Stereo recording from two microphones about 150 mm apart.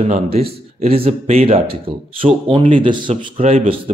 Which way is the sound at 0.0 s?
40° right (ahead or behind).